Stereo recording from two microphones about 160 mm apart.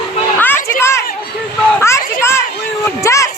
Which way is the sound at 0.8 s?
15° left (ahead or behind).